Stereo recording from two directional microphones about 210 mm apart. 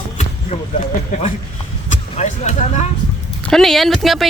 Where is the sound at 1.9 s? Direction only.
35° left (ahead or behind).